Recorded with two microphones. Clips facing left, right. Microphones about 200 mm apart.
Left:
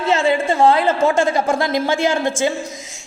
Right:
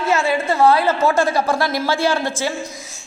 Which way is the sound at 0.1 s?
30° left (ahead or behind).